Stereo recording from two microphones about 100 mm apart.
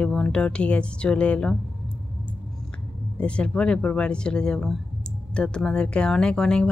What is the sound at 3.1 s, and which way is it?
A woman's voice, 10° left (ahead or behind).